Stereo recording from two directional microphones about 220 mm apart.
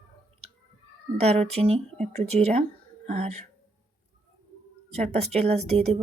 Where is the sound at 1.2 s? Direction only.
30° right (ahead or behind).